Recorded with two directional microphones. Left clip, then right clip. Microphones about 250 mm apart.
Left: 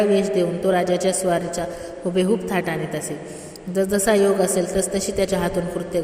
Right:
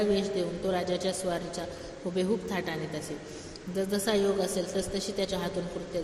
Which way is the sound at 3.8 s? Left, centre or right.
Left.